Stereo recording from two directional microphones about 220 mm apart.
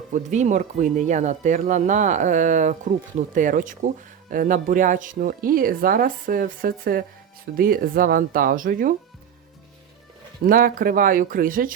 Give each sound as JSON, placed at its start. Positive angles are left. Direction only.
{"t": 0.1, "sound": "speech", "side_deg": -35}
{"t": 10.4, "sound": "speech", "side_deg": -40}